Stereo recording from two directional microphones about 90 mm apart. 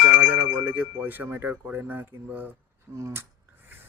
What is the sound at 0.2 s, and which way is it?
Speech, 20° right (ahead or behind).